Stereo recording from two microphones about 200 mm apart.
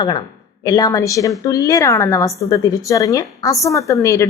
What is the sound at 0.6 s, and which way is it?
A woman's voice, 20° left (ahead or behind).